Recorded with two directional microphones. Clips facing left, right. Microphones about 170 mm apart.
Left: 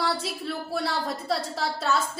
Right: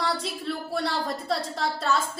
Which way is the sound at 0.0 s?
Centre (ahead or behind).